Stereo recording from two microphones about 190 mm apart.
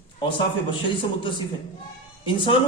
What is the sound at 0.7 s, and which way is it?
A man's voice, 25° left (ahead or behind).